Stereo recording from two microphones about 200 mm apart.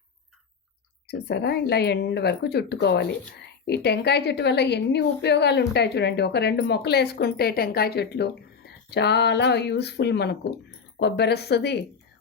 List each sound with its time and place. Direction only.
1.0 s a woman's voice: 55° left (ahead or behind)